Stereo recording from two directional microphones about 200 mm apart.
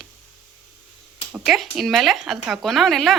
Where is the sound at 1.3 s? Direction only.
Centre (ahead or behind).